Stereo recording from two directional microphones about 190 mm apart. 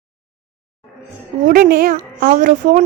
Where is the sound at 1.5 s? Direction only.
50° right (ahead or behind).